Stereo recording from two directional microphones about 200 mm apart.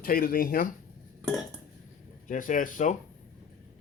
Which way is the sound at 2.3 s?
40° left (ahead or behind).